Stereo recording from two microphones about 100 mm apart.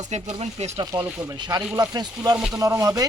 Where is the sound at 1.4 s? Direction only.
40° right (ahead or behind).